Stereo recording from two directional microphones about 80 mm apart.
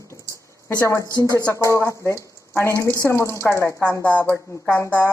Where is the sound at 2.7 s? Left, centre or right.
Right.